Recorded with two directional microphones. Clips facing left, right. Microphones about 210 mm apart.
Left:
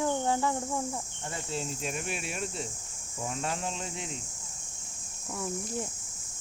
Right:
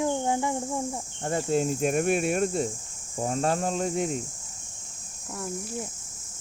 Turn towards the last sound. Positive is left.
turn(degrees=0)  # may be behind; listen again after turning